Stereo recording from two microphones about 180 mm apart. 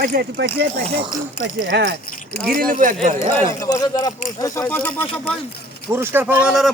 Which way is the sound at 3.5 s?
20° left (ahead or behind).